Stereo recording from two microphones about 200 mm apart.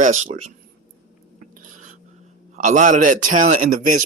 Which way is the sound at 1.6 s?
40° right (ahead or behind).